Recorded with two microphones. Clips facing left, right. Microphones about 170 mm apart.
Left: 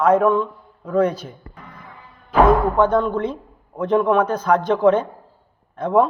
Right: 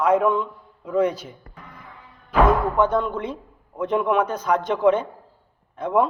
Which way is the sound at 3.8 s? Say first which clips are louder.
Left 4 dB; 45° left (ahead or behind).